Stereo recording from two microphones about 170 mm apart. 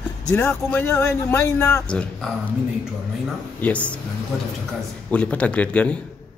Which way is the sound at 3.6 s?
10° left (ahead or behind).